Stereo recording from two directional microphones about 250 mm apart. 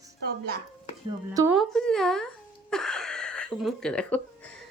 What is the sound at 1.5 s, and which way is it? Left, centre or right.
Speech, centre.